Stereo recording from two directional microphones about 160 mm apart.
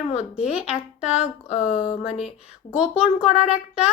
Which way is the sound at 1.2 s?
45° left (ahead or behind).